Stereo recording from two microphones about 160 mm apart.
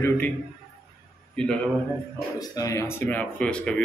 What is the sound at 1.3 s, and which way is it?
Speech, 5° left (ahead or behind).